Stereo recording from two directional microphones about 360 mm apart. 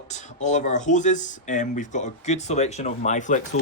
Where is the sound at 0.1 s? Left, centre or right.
Centre.